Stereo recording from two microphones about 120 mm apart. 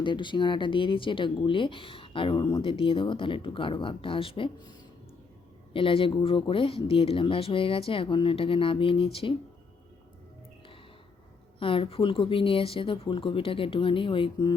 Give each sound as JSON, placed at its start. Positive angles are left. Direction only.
{"t": 0.0, "sound": "speech", "side_deg": 40}
{"t": 5.7, "sound": "speech", "side_deg": 50}
{"t": 11.6, "sound": "speech", "side_deg": 50}